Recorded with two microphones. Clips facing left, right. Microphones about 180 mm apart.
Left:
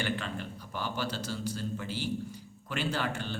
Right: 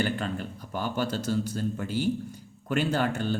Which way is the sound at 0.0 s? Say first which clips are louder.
Right 5 dB; 45° right (ahead or behind).